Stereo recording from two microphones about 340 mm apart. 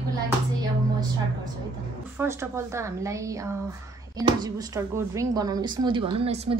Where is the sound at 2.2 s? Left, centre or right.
Centre.